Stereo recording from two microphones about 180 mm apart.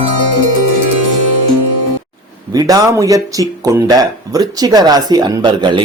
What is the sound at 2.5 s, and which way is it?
A man's voice, 20° right (ahead or behind).